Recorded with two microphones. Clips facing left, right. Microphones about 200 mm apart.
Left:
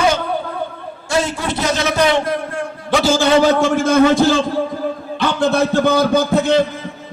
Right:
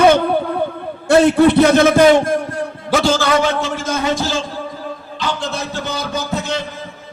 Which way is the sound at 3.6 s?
55° left (ahead or behind).